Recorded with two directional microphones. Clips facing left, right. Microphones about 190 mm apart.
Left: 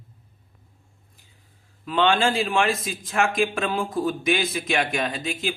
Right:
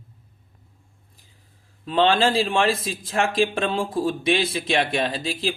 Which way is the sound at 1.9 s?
30° right (ahead or behind).